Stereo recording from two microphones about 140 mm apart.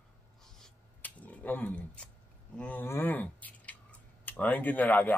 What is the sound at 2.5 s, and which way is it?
Speech, 10° left (ahead or behind).